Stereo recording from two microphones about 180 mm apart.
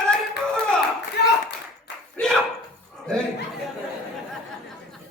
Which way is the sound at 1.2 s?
65° left (ahead or behind).